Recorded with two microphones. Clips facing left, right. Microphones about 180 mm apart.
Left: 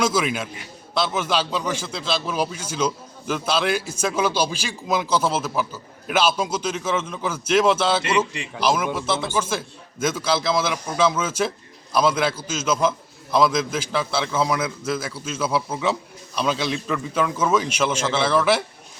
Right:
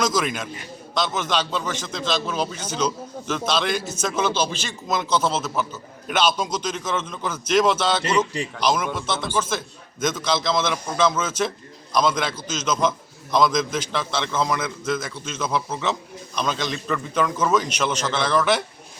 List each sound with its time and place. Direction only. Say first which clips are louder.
0.0 s a man's voice: left 1 dB; 5° left (ahead or behind)